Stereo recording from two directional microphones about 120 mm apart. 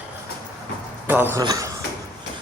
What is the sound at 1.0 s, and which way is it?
Speech, 15° right (ahead or behind).